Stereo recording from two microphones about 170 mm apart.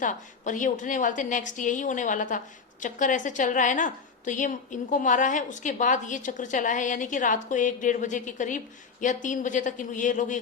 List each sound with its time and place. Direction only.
0.0 s a woman's voice: 50° left (ahead or behind)